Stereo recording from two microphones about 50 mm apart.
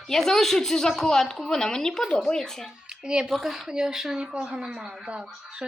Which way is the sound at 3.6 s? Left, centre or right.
Centre.